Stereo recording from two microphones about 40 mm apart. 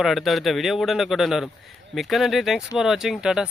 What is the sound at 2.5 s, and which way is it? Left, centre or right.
Speech, centre.